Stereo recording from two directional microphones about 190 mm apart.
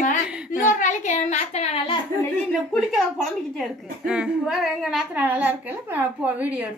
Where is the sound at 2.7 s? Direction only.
5° left (ahead or behind).